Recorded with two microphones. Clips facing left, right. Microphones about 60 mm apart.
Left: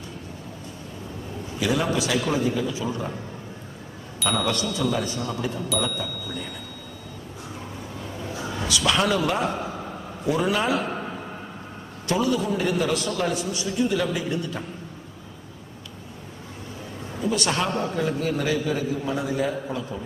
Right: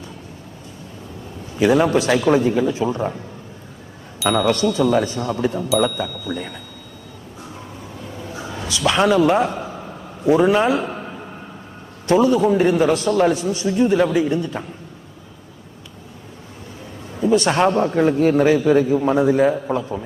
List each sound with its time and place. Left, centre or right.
1.5 s a man's voice: right
4.2 s speech: centre
4.7 s a man's voice: right
5.1 s a man's voice: centre
8.3 s a man's voice: right
12.0 s a man's voice: right
17.2 s a man's voice: right